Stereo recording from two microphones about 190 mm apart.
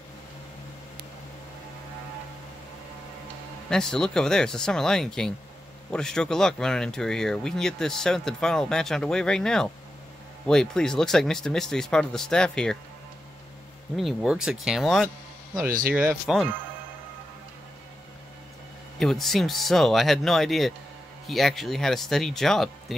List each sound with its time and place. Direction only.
3.7 s speech: 5° left (ahead or behind)
13.9 s speech: centre (ahead or behind)
18.9 s speech: centre (ahead or behind)